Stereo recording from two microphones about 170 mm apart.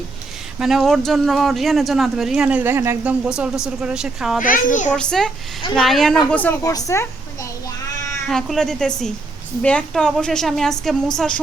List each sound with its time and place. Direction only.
0.6 s speech: centre (ahead or behind)
4.4 s a child's voice: 50° left (ahead or behind)
4.9 s a woman's voice: 5° left (ahead or behind)
8.3 s speech: 5° left (ahead or behind)